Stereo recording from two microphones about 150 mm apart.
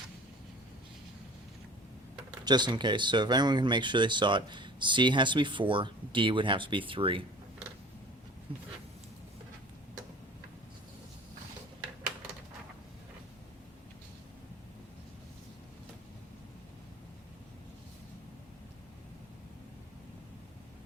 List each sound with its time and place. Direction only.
2.4 s speech: 30° right (ahead or behind)
8.5 s speech: 35° right (ahead or behind)